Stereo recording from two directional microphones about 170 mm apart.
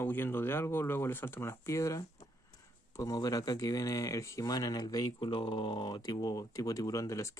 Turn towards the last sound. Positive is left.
turn(degrees=20)  # may be behind; listen again after turning